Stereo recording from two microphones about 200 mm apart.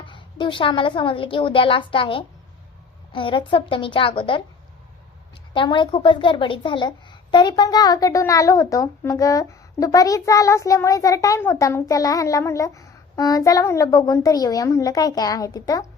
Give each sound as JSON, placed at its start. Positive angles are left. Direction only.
{"t": 0.0, "sound": "a woman's voice", "side_deg": 25}
{"t": 5.5, "sound": "a woman's voice", "side_deg": 25}